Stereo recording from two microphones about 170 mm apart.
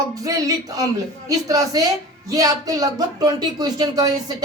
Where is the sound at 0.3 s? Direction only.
20° right (ahead or behind).